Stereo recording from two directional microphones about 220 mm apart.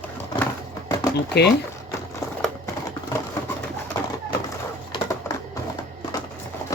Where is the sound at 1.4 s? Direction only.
50° left (ahead or behind).